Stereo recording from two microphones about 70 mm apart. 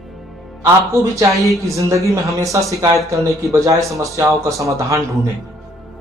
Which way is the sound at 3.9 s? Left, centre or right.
Right.